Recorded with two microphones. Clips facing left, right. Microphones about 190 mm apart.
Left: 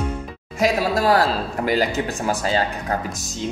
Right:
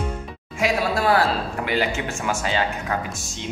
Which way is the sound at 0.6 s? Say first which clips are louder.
Left 3 dB; 40° left (ahead or behind).